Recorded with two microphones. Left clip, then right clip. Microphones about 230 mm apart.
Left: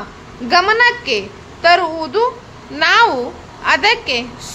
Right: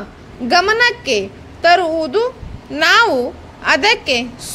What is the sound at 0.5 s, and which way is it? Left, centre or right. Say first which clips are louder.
A child's voice: left 1 dB; right.